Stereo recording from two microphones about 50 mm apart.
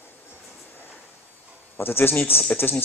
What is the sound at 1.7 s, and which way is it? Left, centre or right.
Speech, left.